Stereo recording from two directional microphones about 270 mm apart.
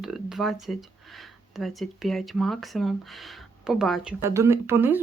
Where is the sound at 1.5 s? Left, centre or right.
Centre.